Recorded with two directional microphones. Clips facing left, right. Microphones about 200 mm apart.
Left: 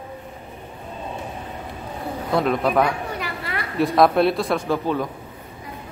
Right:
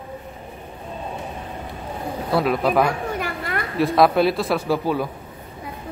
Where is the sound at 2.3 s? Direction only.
5° right (ahead or behind).